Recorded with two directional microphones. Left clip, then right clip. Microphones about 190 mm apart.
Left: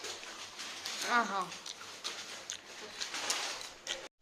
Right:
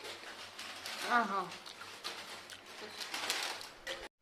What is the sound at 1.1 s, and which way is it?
Speech, centre (ahead or behind).